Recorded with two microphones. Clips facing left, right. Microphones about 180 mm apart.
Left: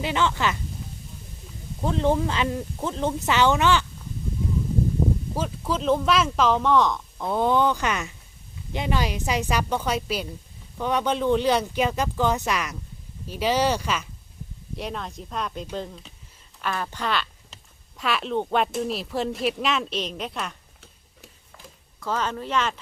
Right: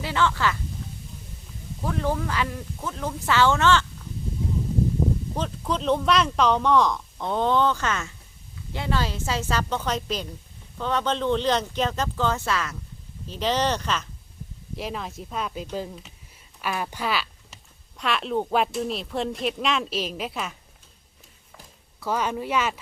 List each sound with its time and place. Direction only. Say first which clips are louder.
0.0 s speech: even; 20° left (ahead or behind)
1.8 s speech: left 4 dB; 25° left (ahead or behind)
5.3 s speech: left 1 dB; 5° left (ahead or behind)
14.8 s speech: even; centre (ahead or behind)
22.0 s speech: right 1 dB; 10° right (ahead or behind)